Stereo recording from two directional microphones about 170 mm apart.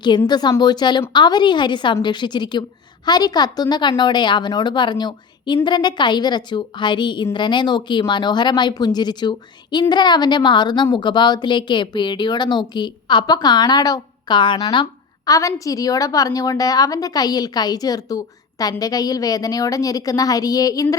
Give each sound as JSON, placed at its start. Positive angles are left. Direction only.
{"t": 0.3, "sound": "a woman's voice", "side_deg": 25}